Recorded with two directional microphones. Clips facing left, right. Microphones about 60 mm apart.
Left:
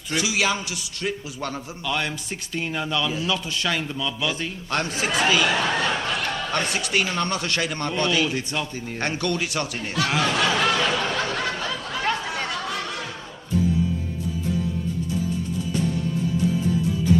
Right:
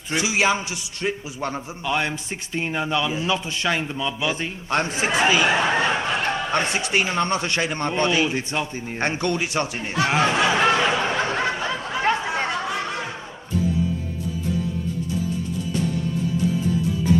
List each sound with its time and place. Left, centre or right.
0.1 s a man's voice: right